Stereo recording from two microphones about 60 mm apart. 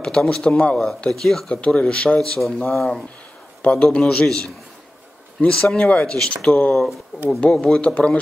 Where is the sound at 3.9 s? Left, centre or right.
Centre.